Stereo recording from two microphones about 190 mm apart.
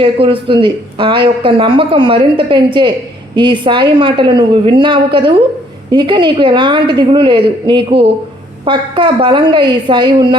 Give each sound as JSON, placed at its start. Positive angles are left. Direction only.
{"t": 0.0, "sound": "speech", "side_deg": -30}